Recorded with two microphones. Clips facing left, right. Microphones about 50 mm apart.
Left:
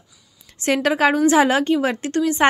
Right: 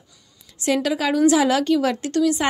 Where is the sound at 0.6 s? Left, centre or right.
Left.